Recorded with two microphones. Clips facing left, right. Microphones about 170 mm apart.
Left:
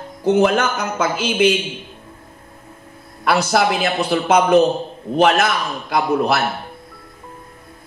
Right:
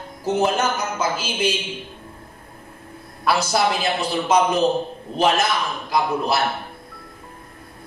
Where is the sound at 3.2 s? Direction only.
60° left (ahead or behind).